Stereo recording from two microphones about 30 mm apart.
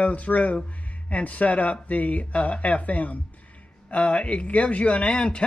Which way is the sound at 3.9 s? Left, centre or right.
Left.